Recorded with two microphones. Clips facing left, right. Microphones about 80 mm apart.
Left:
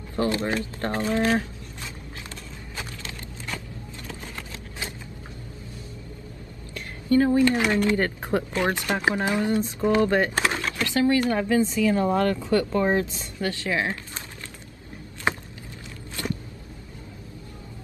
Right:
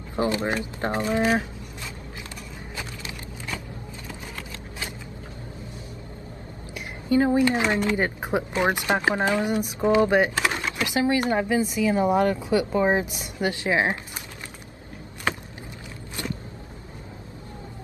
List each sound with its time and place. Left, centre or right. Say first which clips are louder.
0.1 s speech: even; centre
3.0 s vehicle: right 1 dB; centre
6.7 s speech: left 1 dB; centre
15.3 s vehicle: left 1 dB; left
16.2 s vehicle: left 2 dB; right